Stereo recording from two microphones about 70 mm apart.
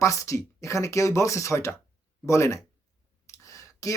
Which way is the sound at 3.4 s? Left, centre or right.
Left.